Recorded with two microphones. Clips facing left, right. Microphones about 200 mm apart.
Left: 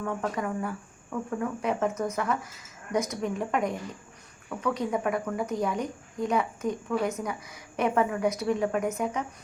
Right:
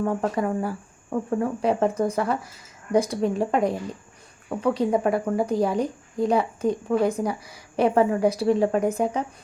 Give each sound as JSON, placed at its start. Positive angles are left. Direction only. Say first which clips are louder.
{"t": 0.0, "sound": "a woman's voice", "louder": "right 6 dB", "side_deg": -35}